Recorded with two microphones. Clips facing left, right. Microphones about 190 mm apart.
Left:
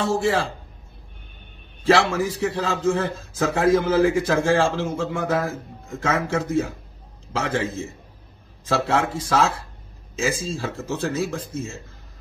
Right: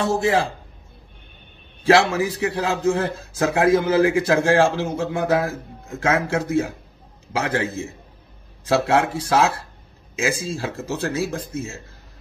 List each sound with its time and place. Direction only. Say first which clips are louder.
0.1 s a man's voice: right 2 dB; 15° right (ahead or behind)
1.8 s a man's voice: right 2 dB; 15° right (ahead or behind)